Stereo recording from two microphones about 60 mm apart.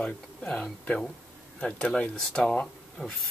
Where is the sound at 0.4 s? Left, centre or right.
Centre.